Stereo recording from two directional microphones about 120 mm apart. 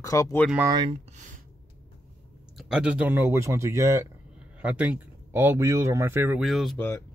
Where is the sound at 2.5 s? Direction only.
5° right (ahead or behind); by 4.0 s 25° right (ahead or behind).